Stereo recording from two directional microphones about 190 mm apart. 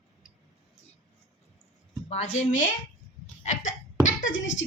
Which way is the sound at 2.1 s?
35° left (ahead or behind).